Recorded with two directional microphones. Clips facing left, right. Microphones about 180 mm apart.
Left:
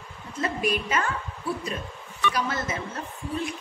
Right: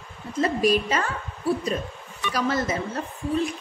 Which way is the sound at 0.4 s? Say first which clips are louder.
Right 6 dB; 35° right (ahead or behind).